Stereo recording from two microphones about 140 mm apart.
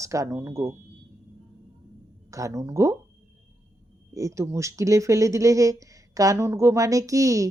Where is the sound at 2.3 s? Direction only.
20° right (ahead or behind).